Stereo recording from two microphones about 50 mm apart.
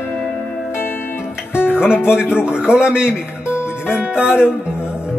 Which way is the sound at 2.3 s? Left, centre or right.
Centre.